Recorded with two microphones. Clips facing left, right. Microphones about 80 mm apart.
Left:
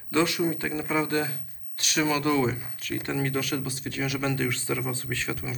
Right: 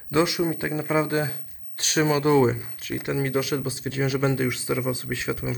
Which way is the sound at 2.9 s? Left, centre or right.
Centre.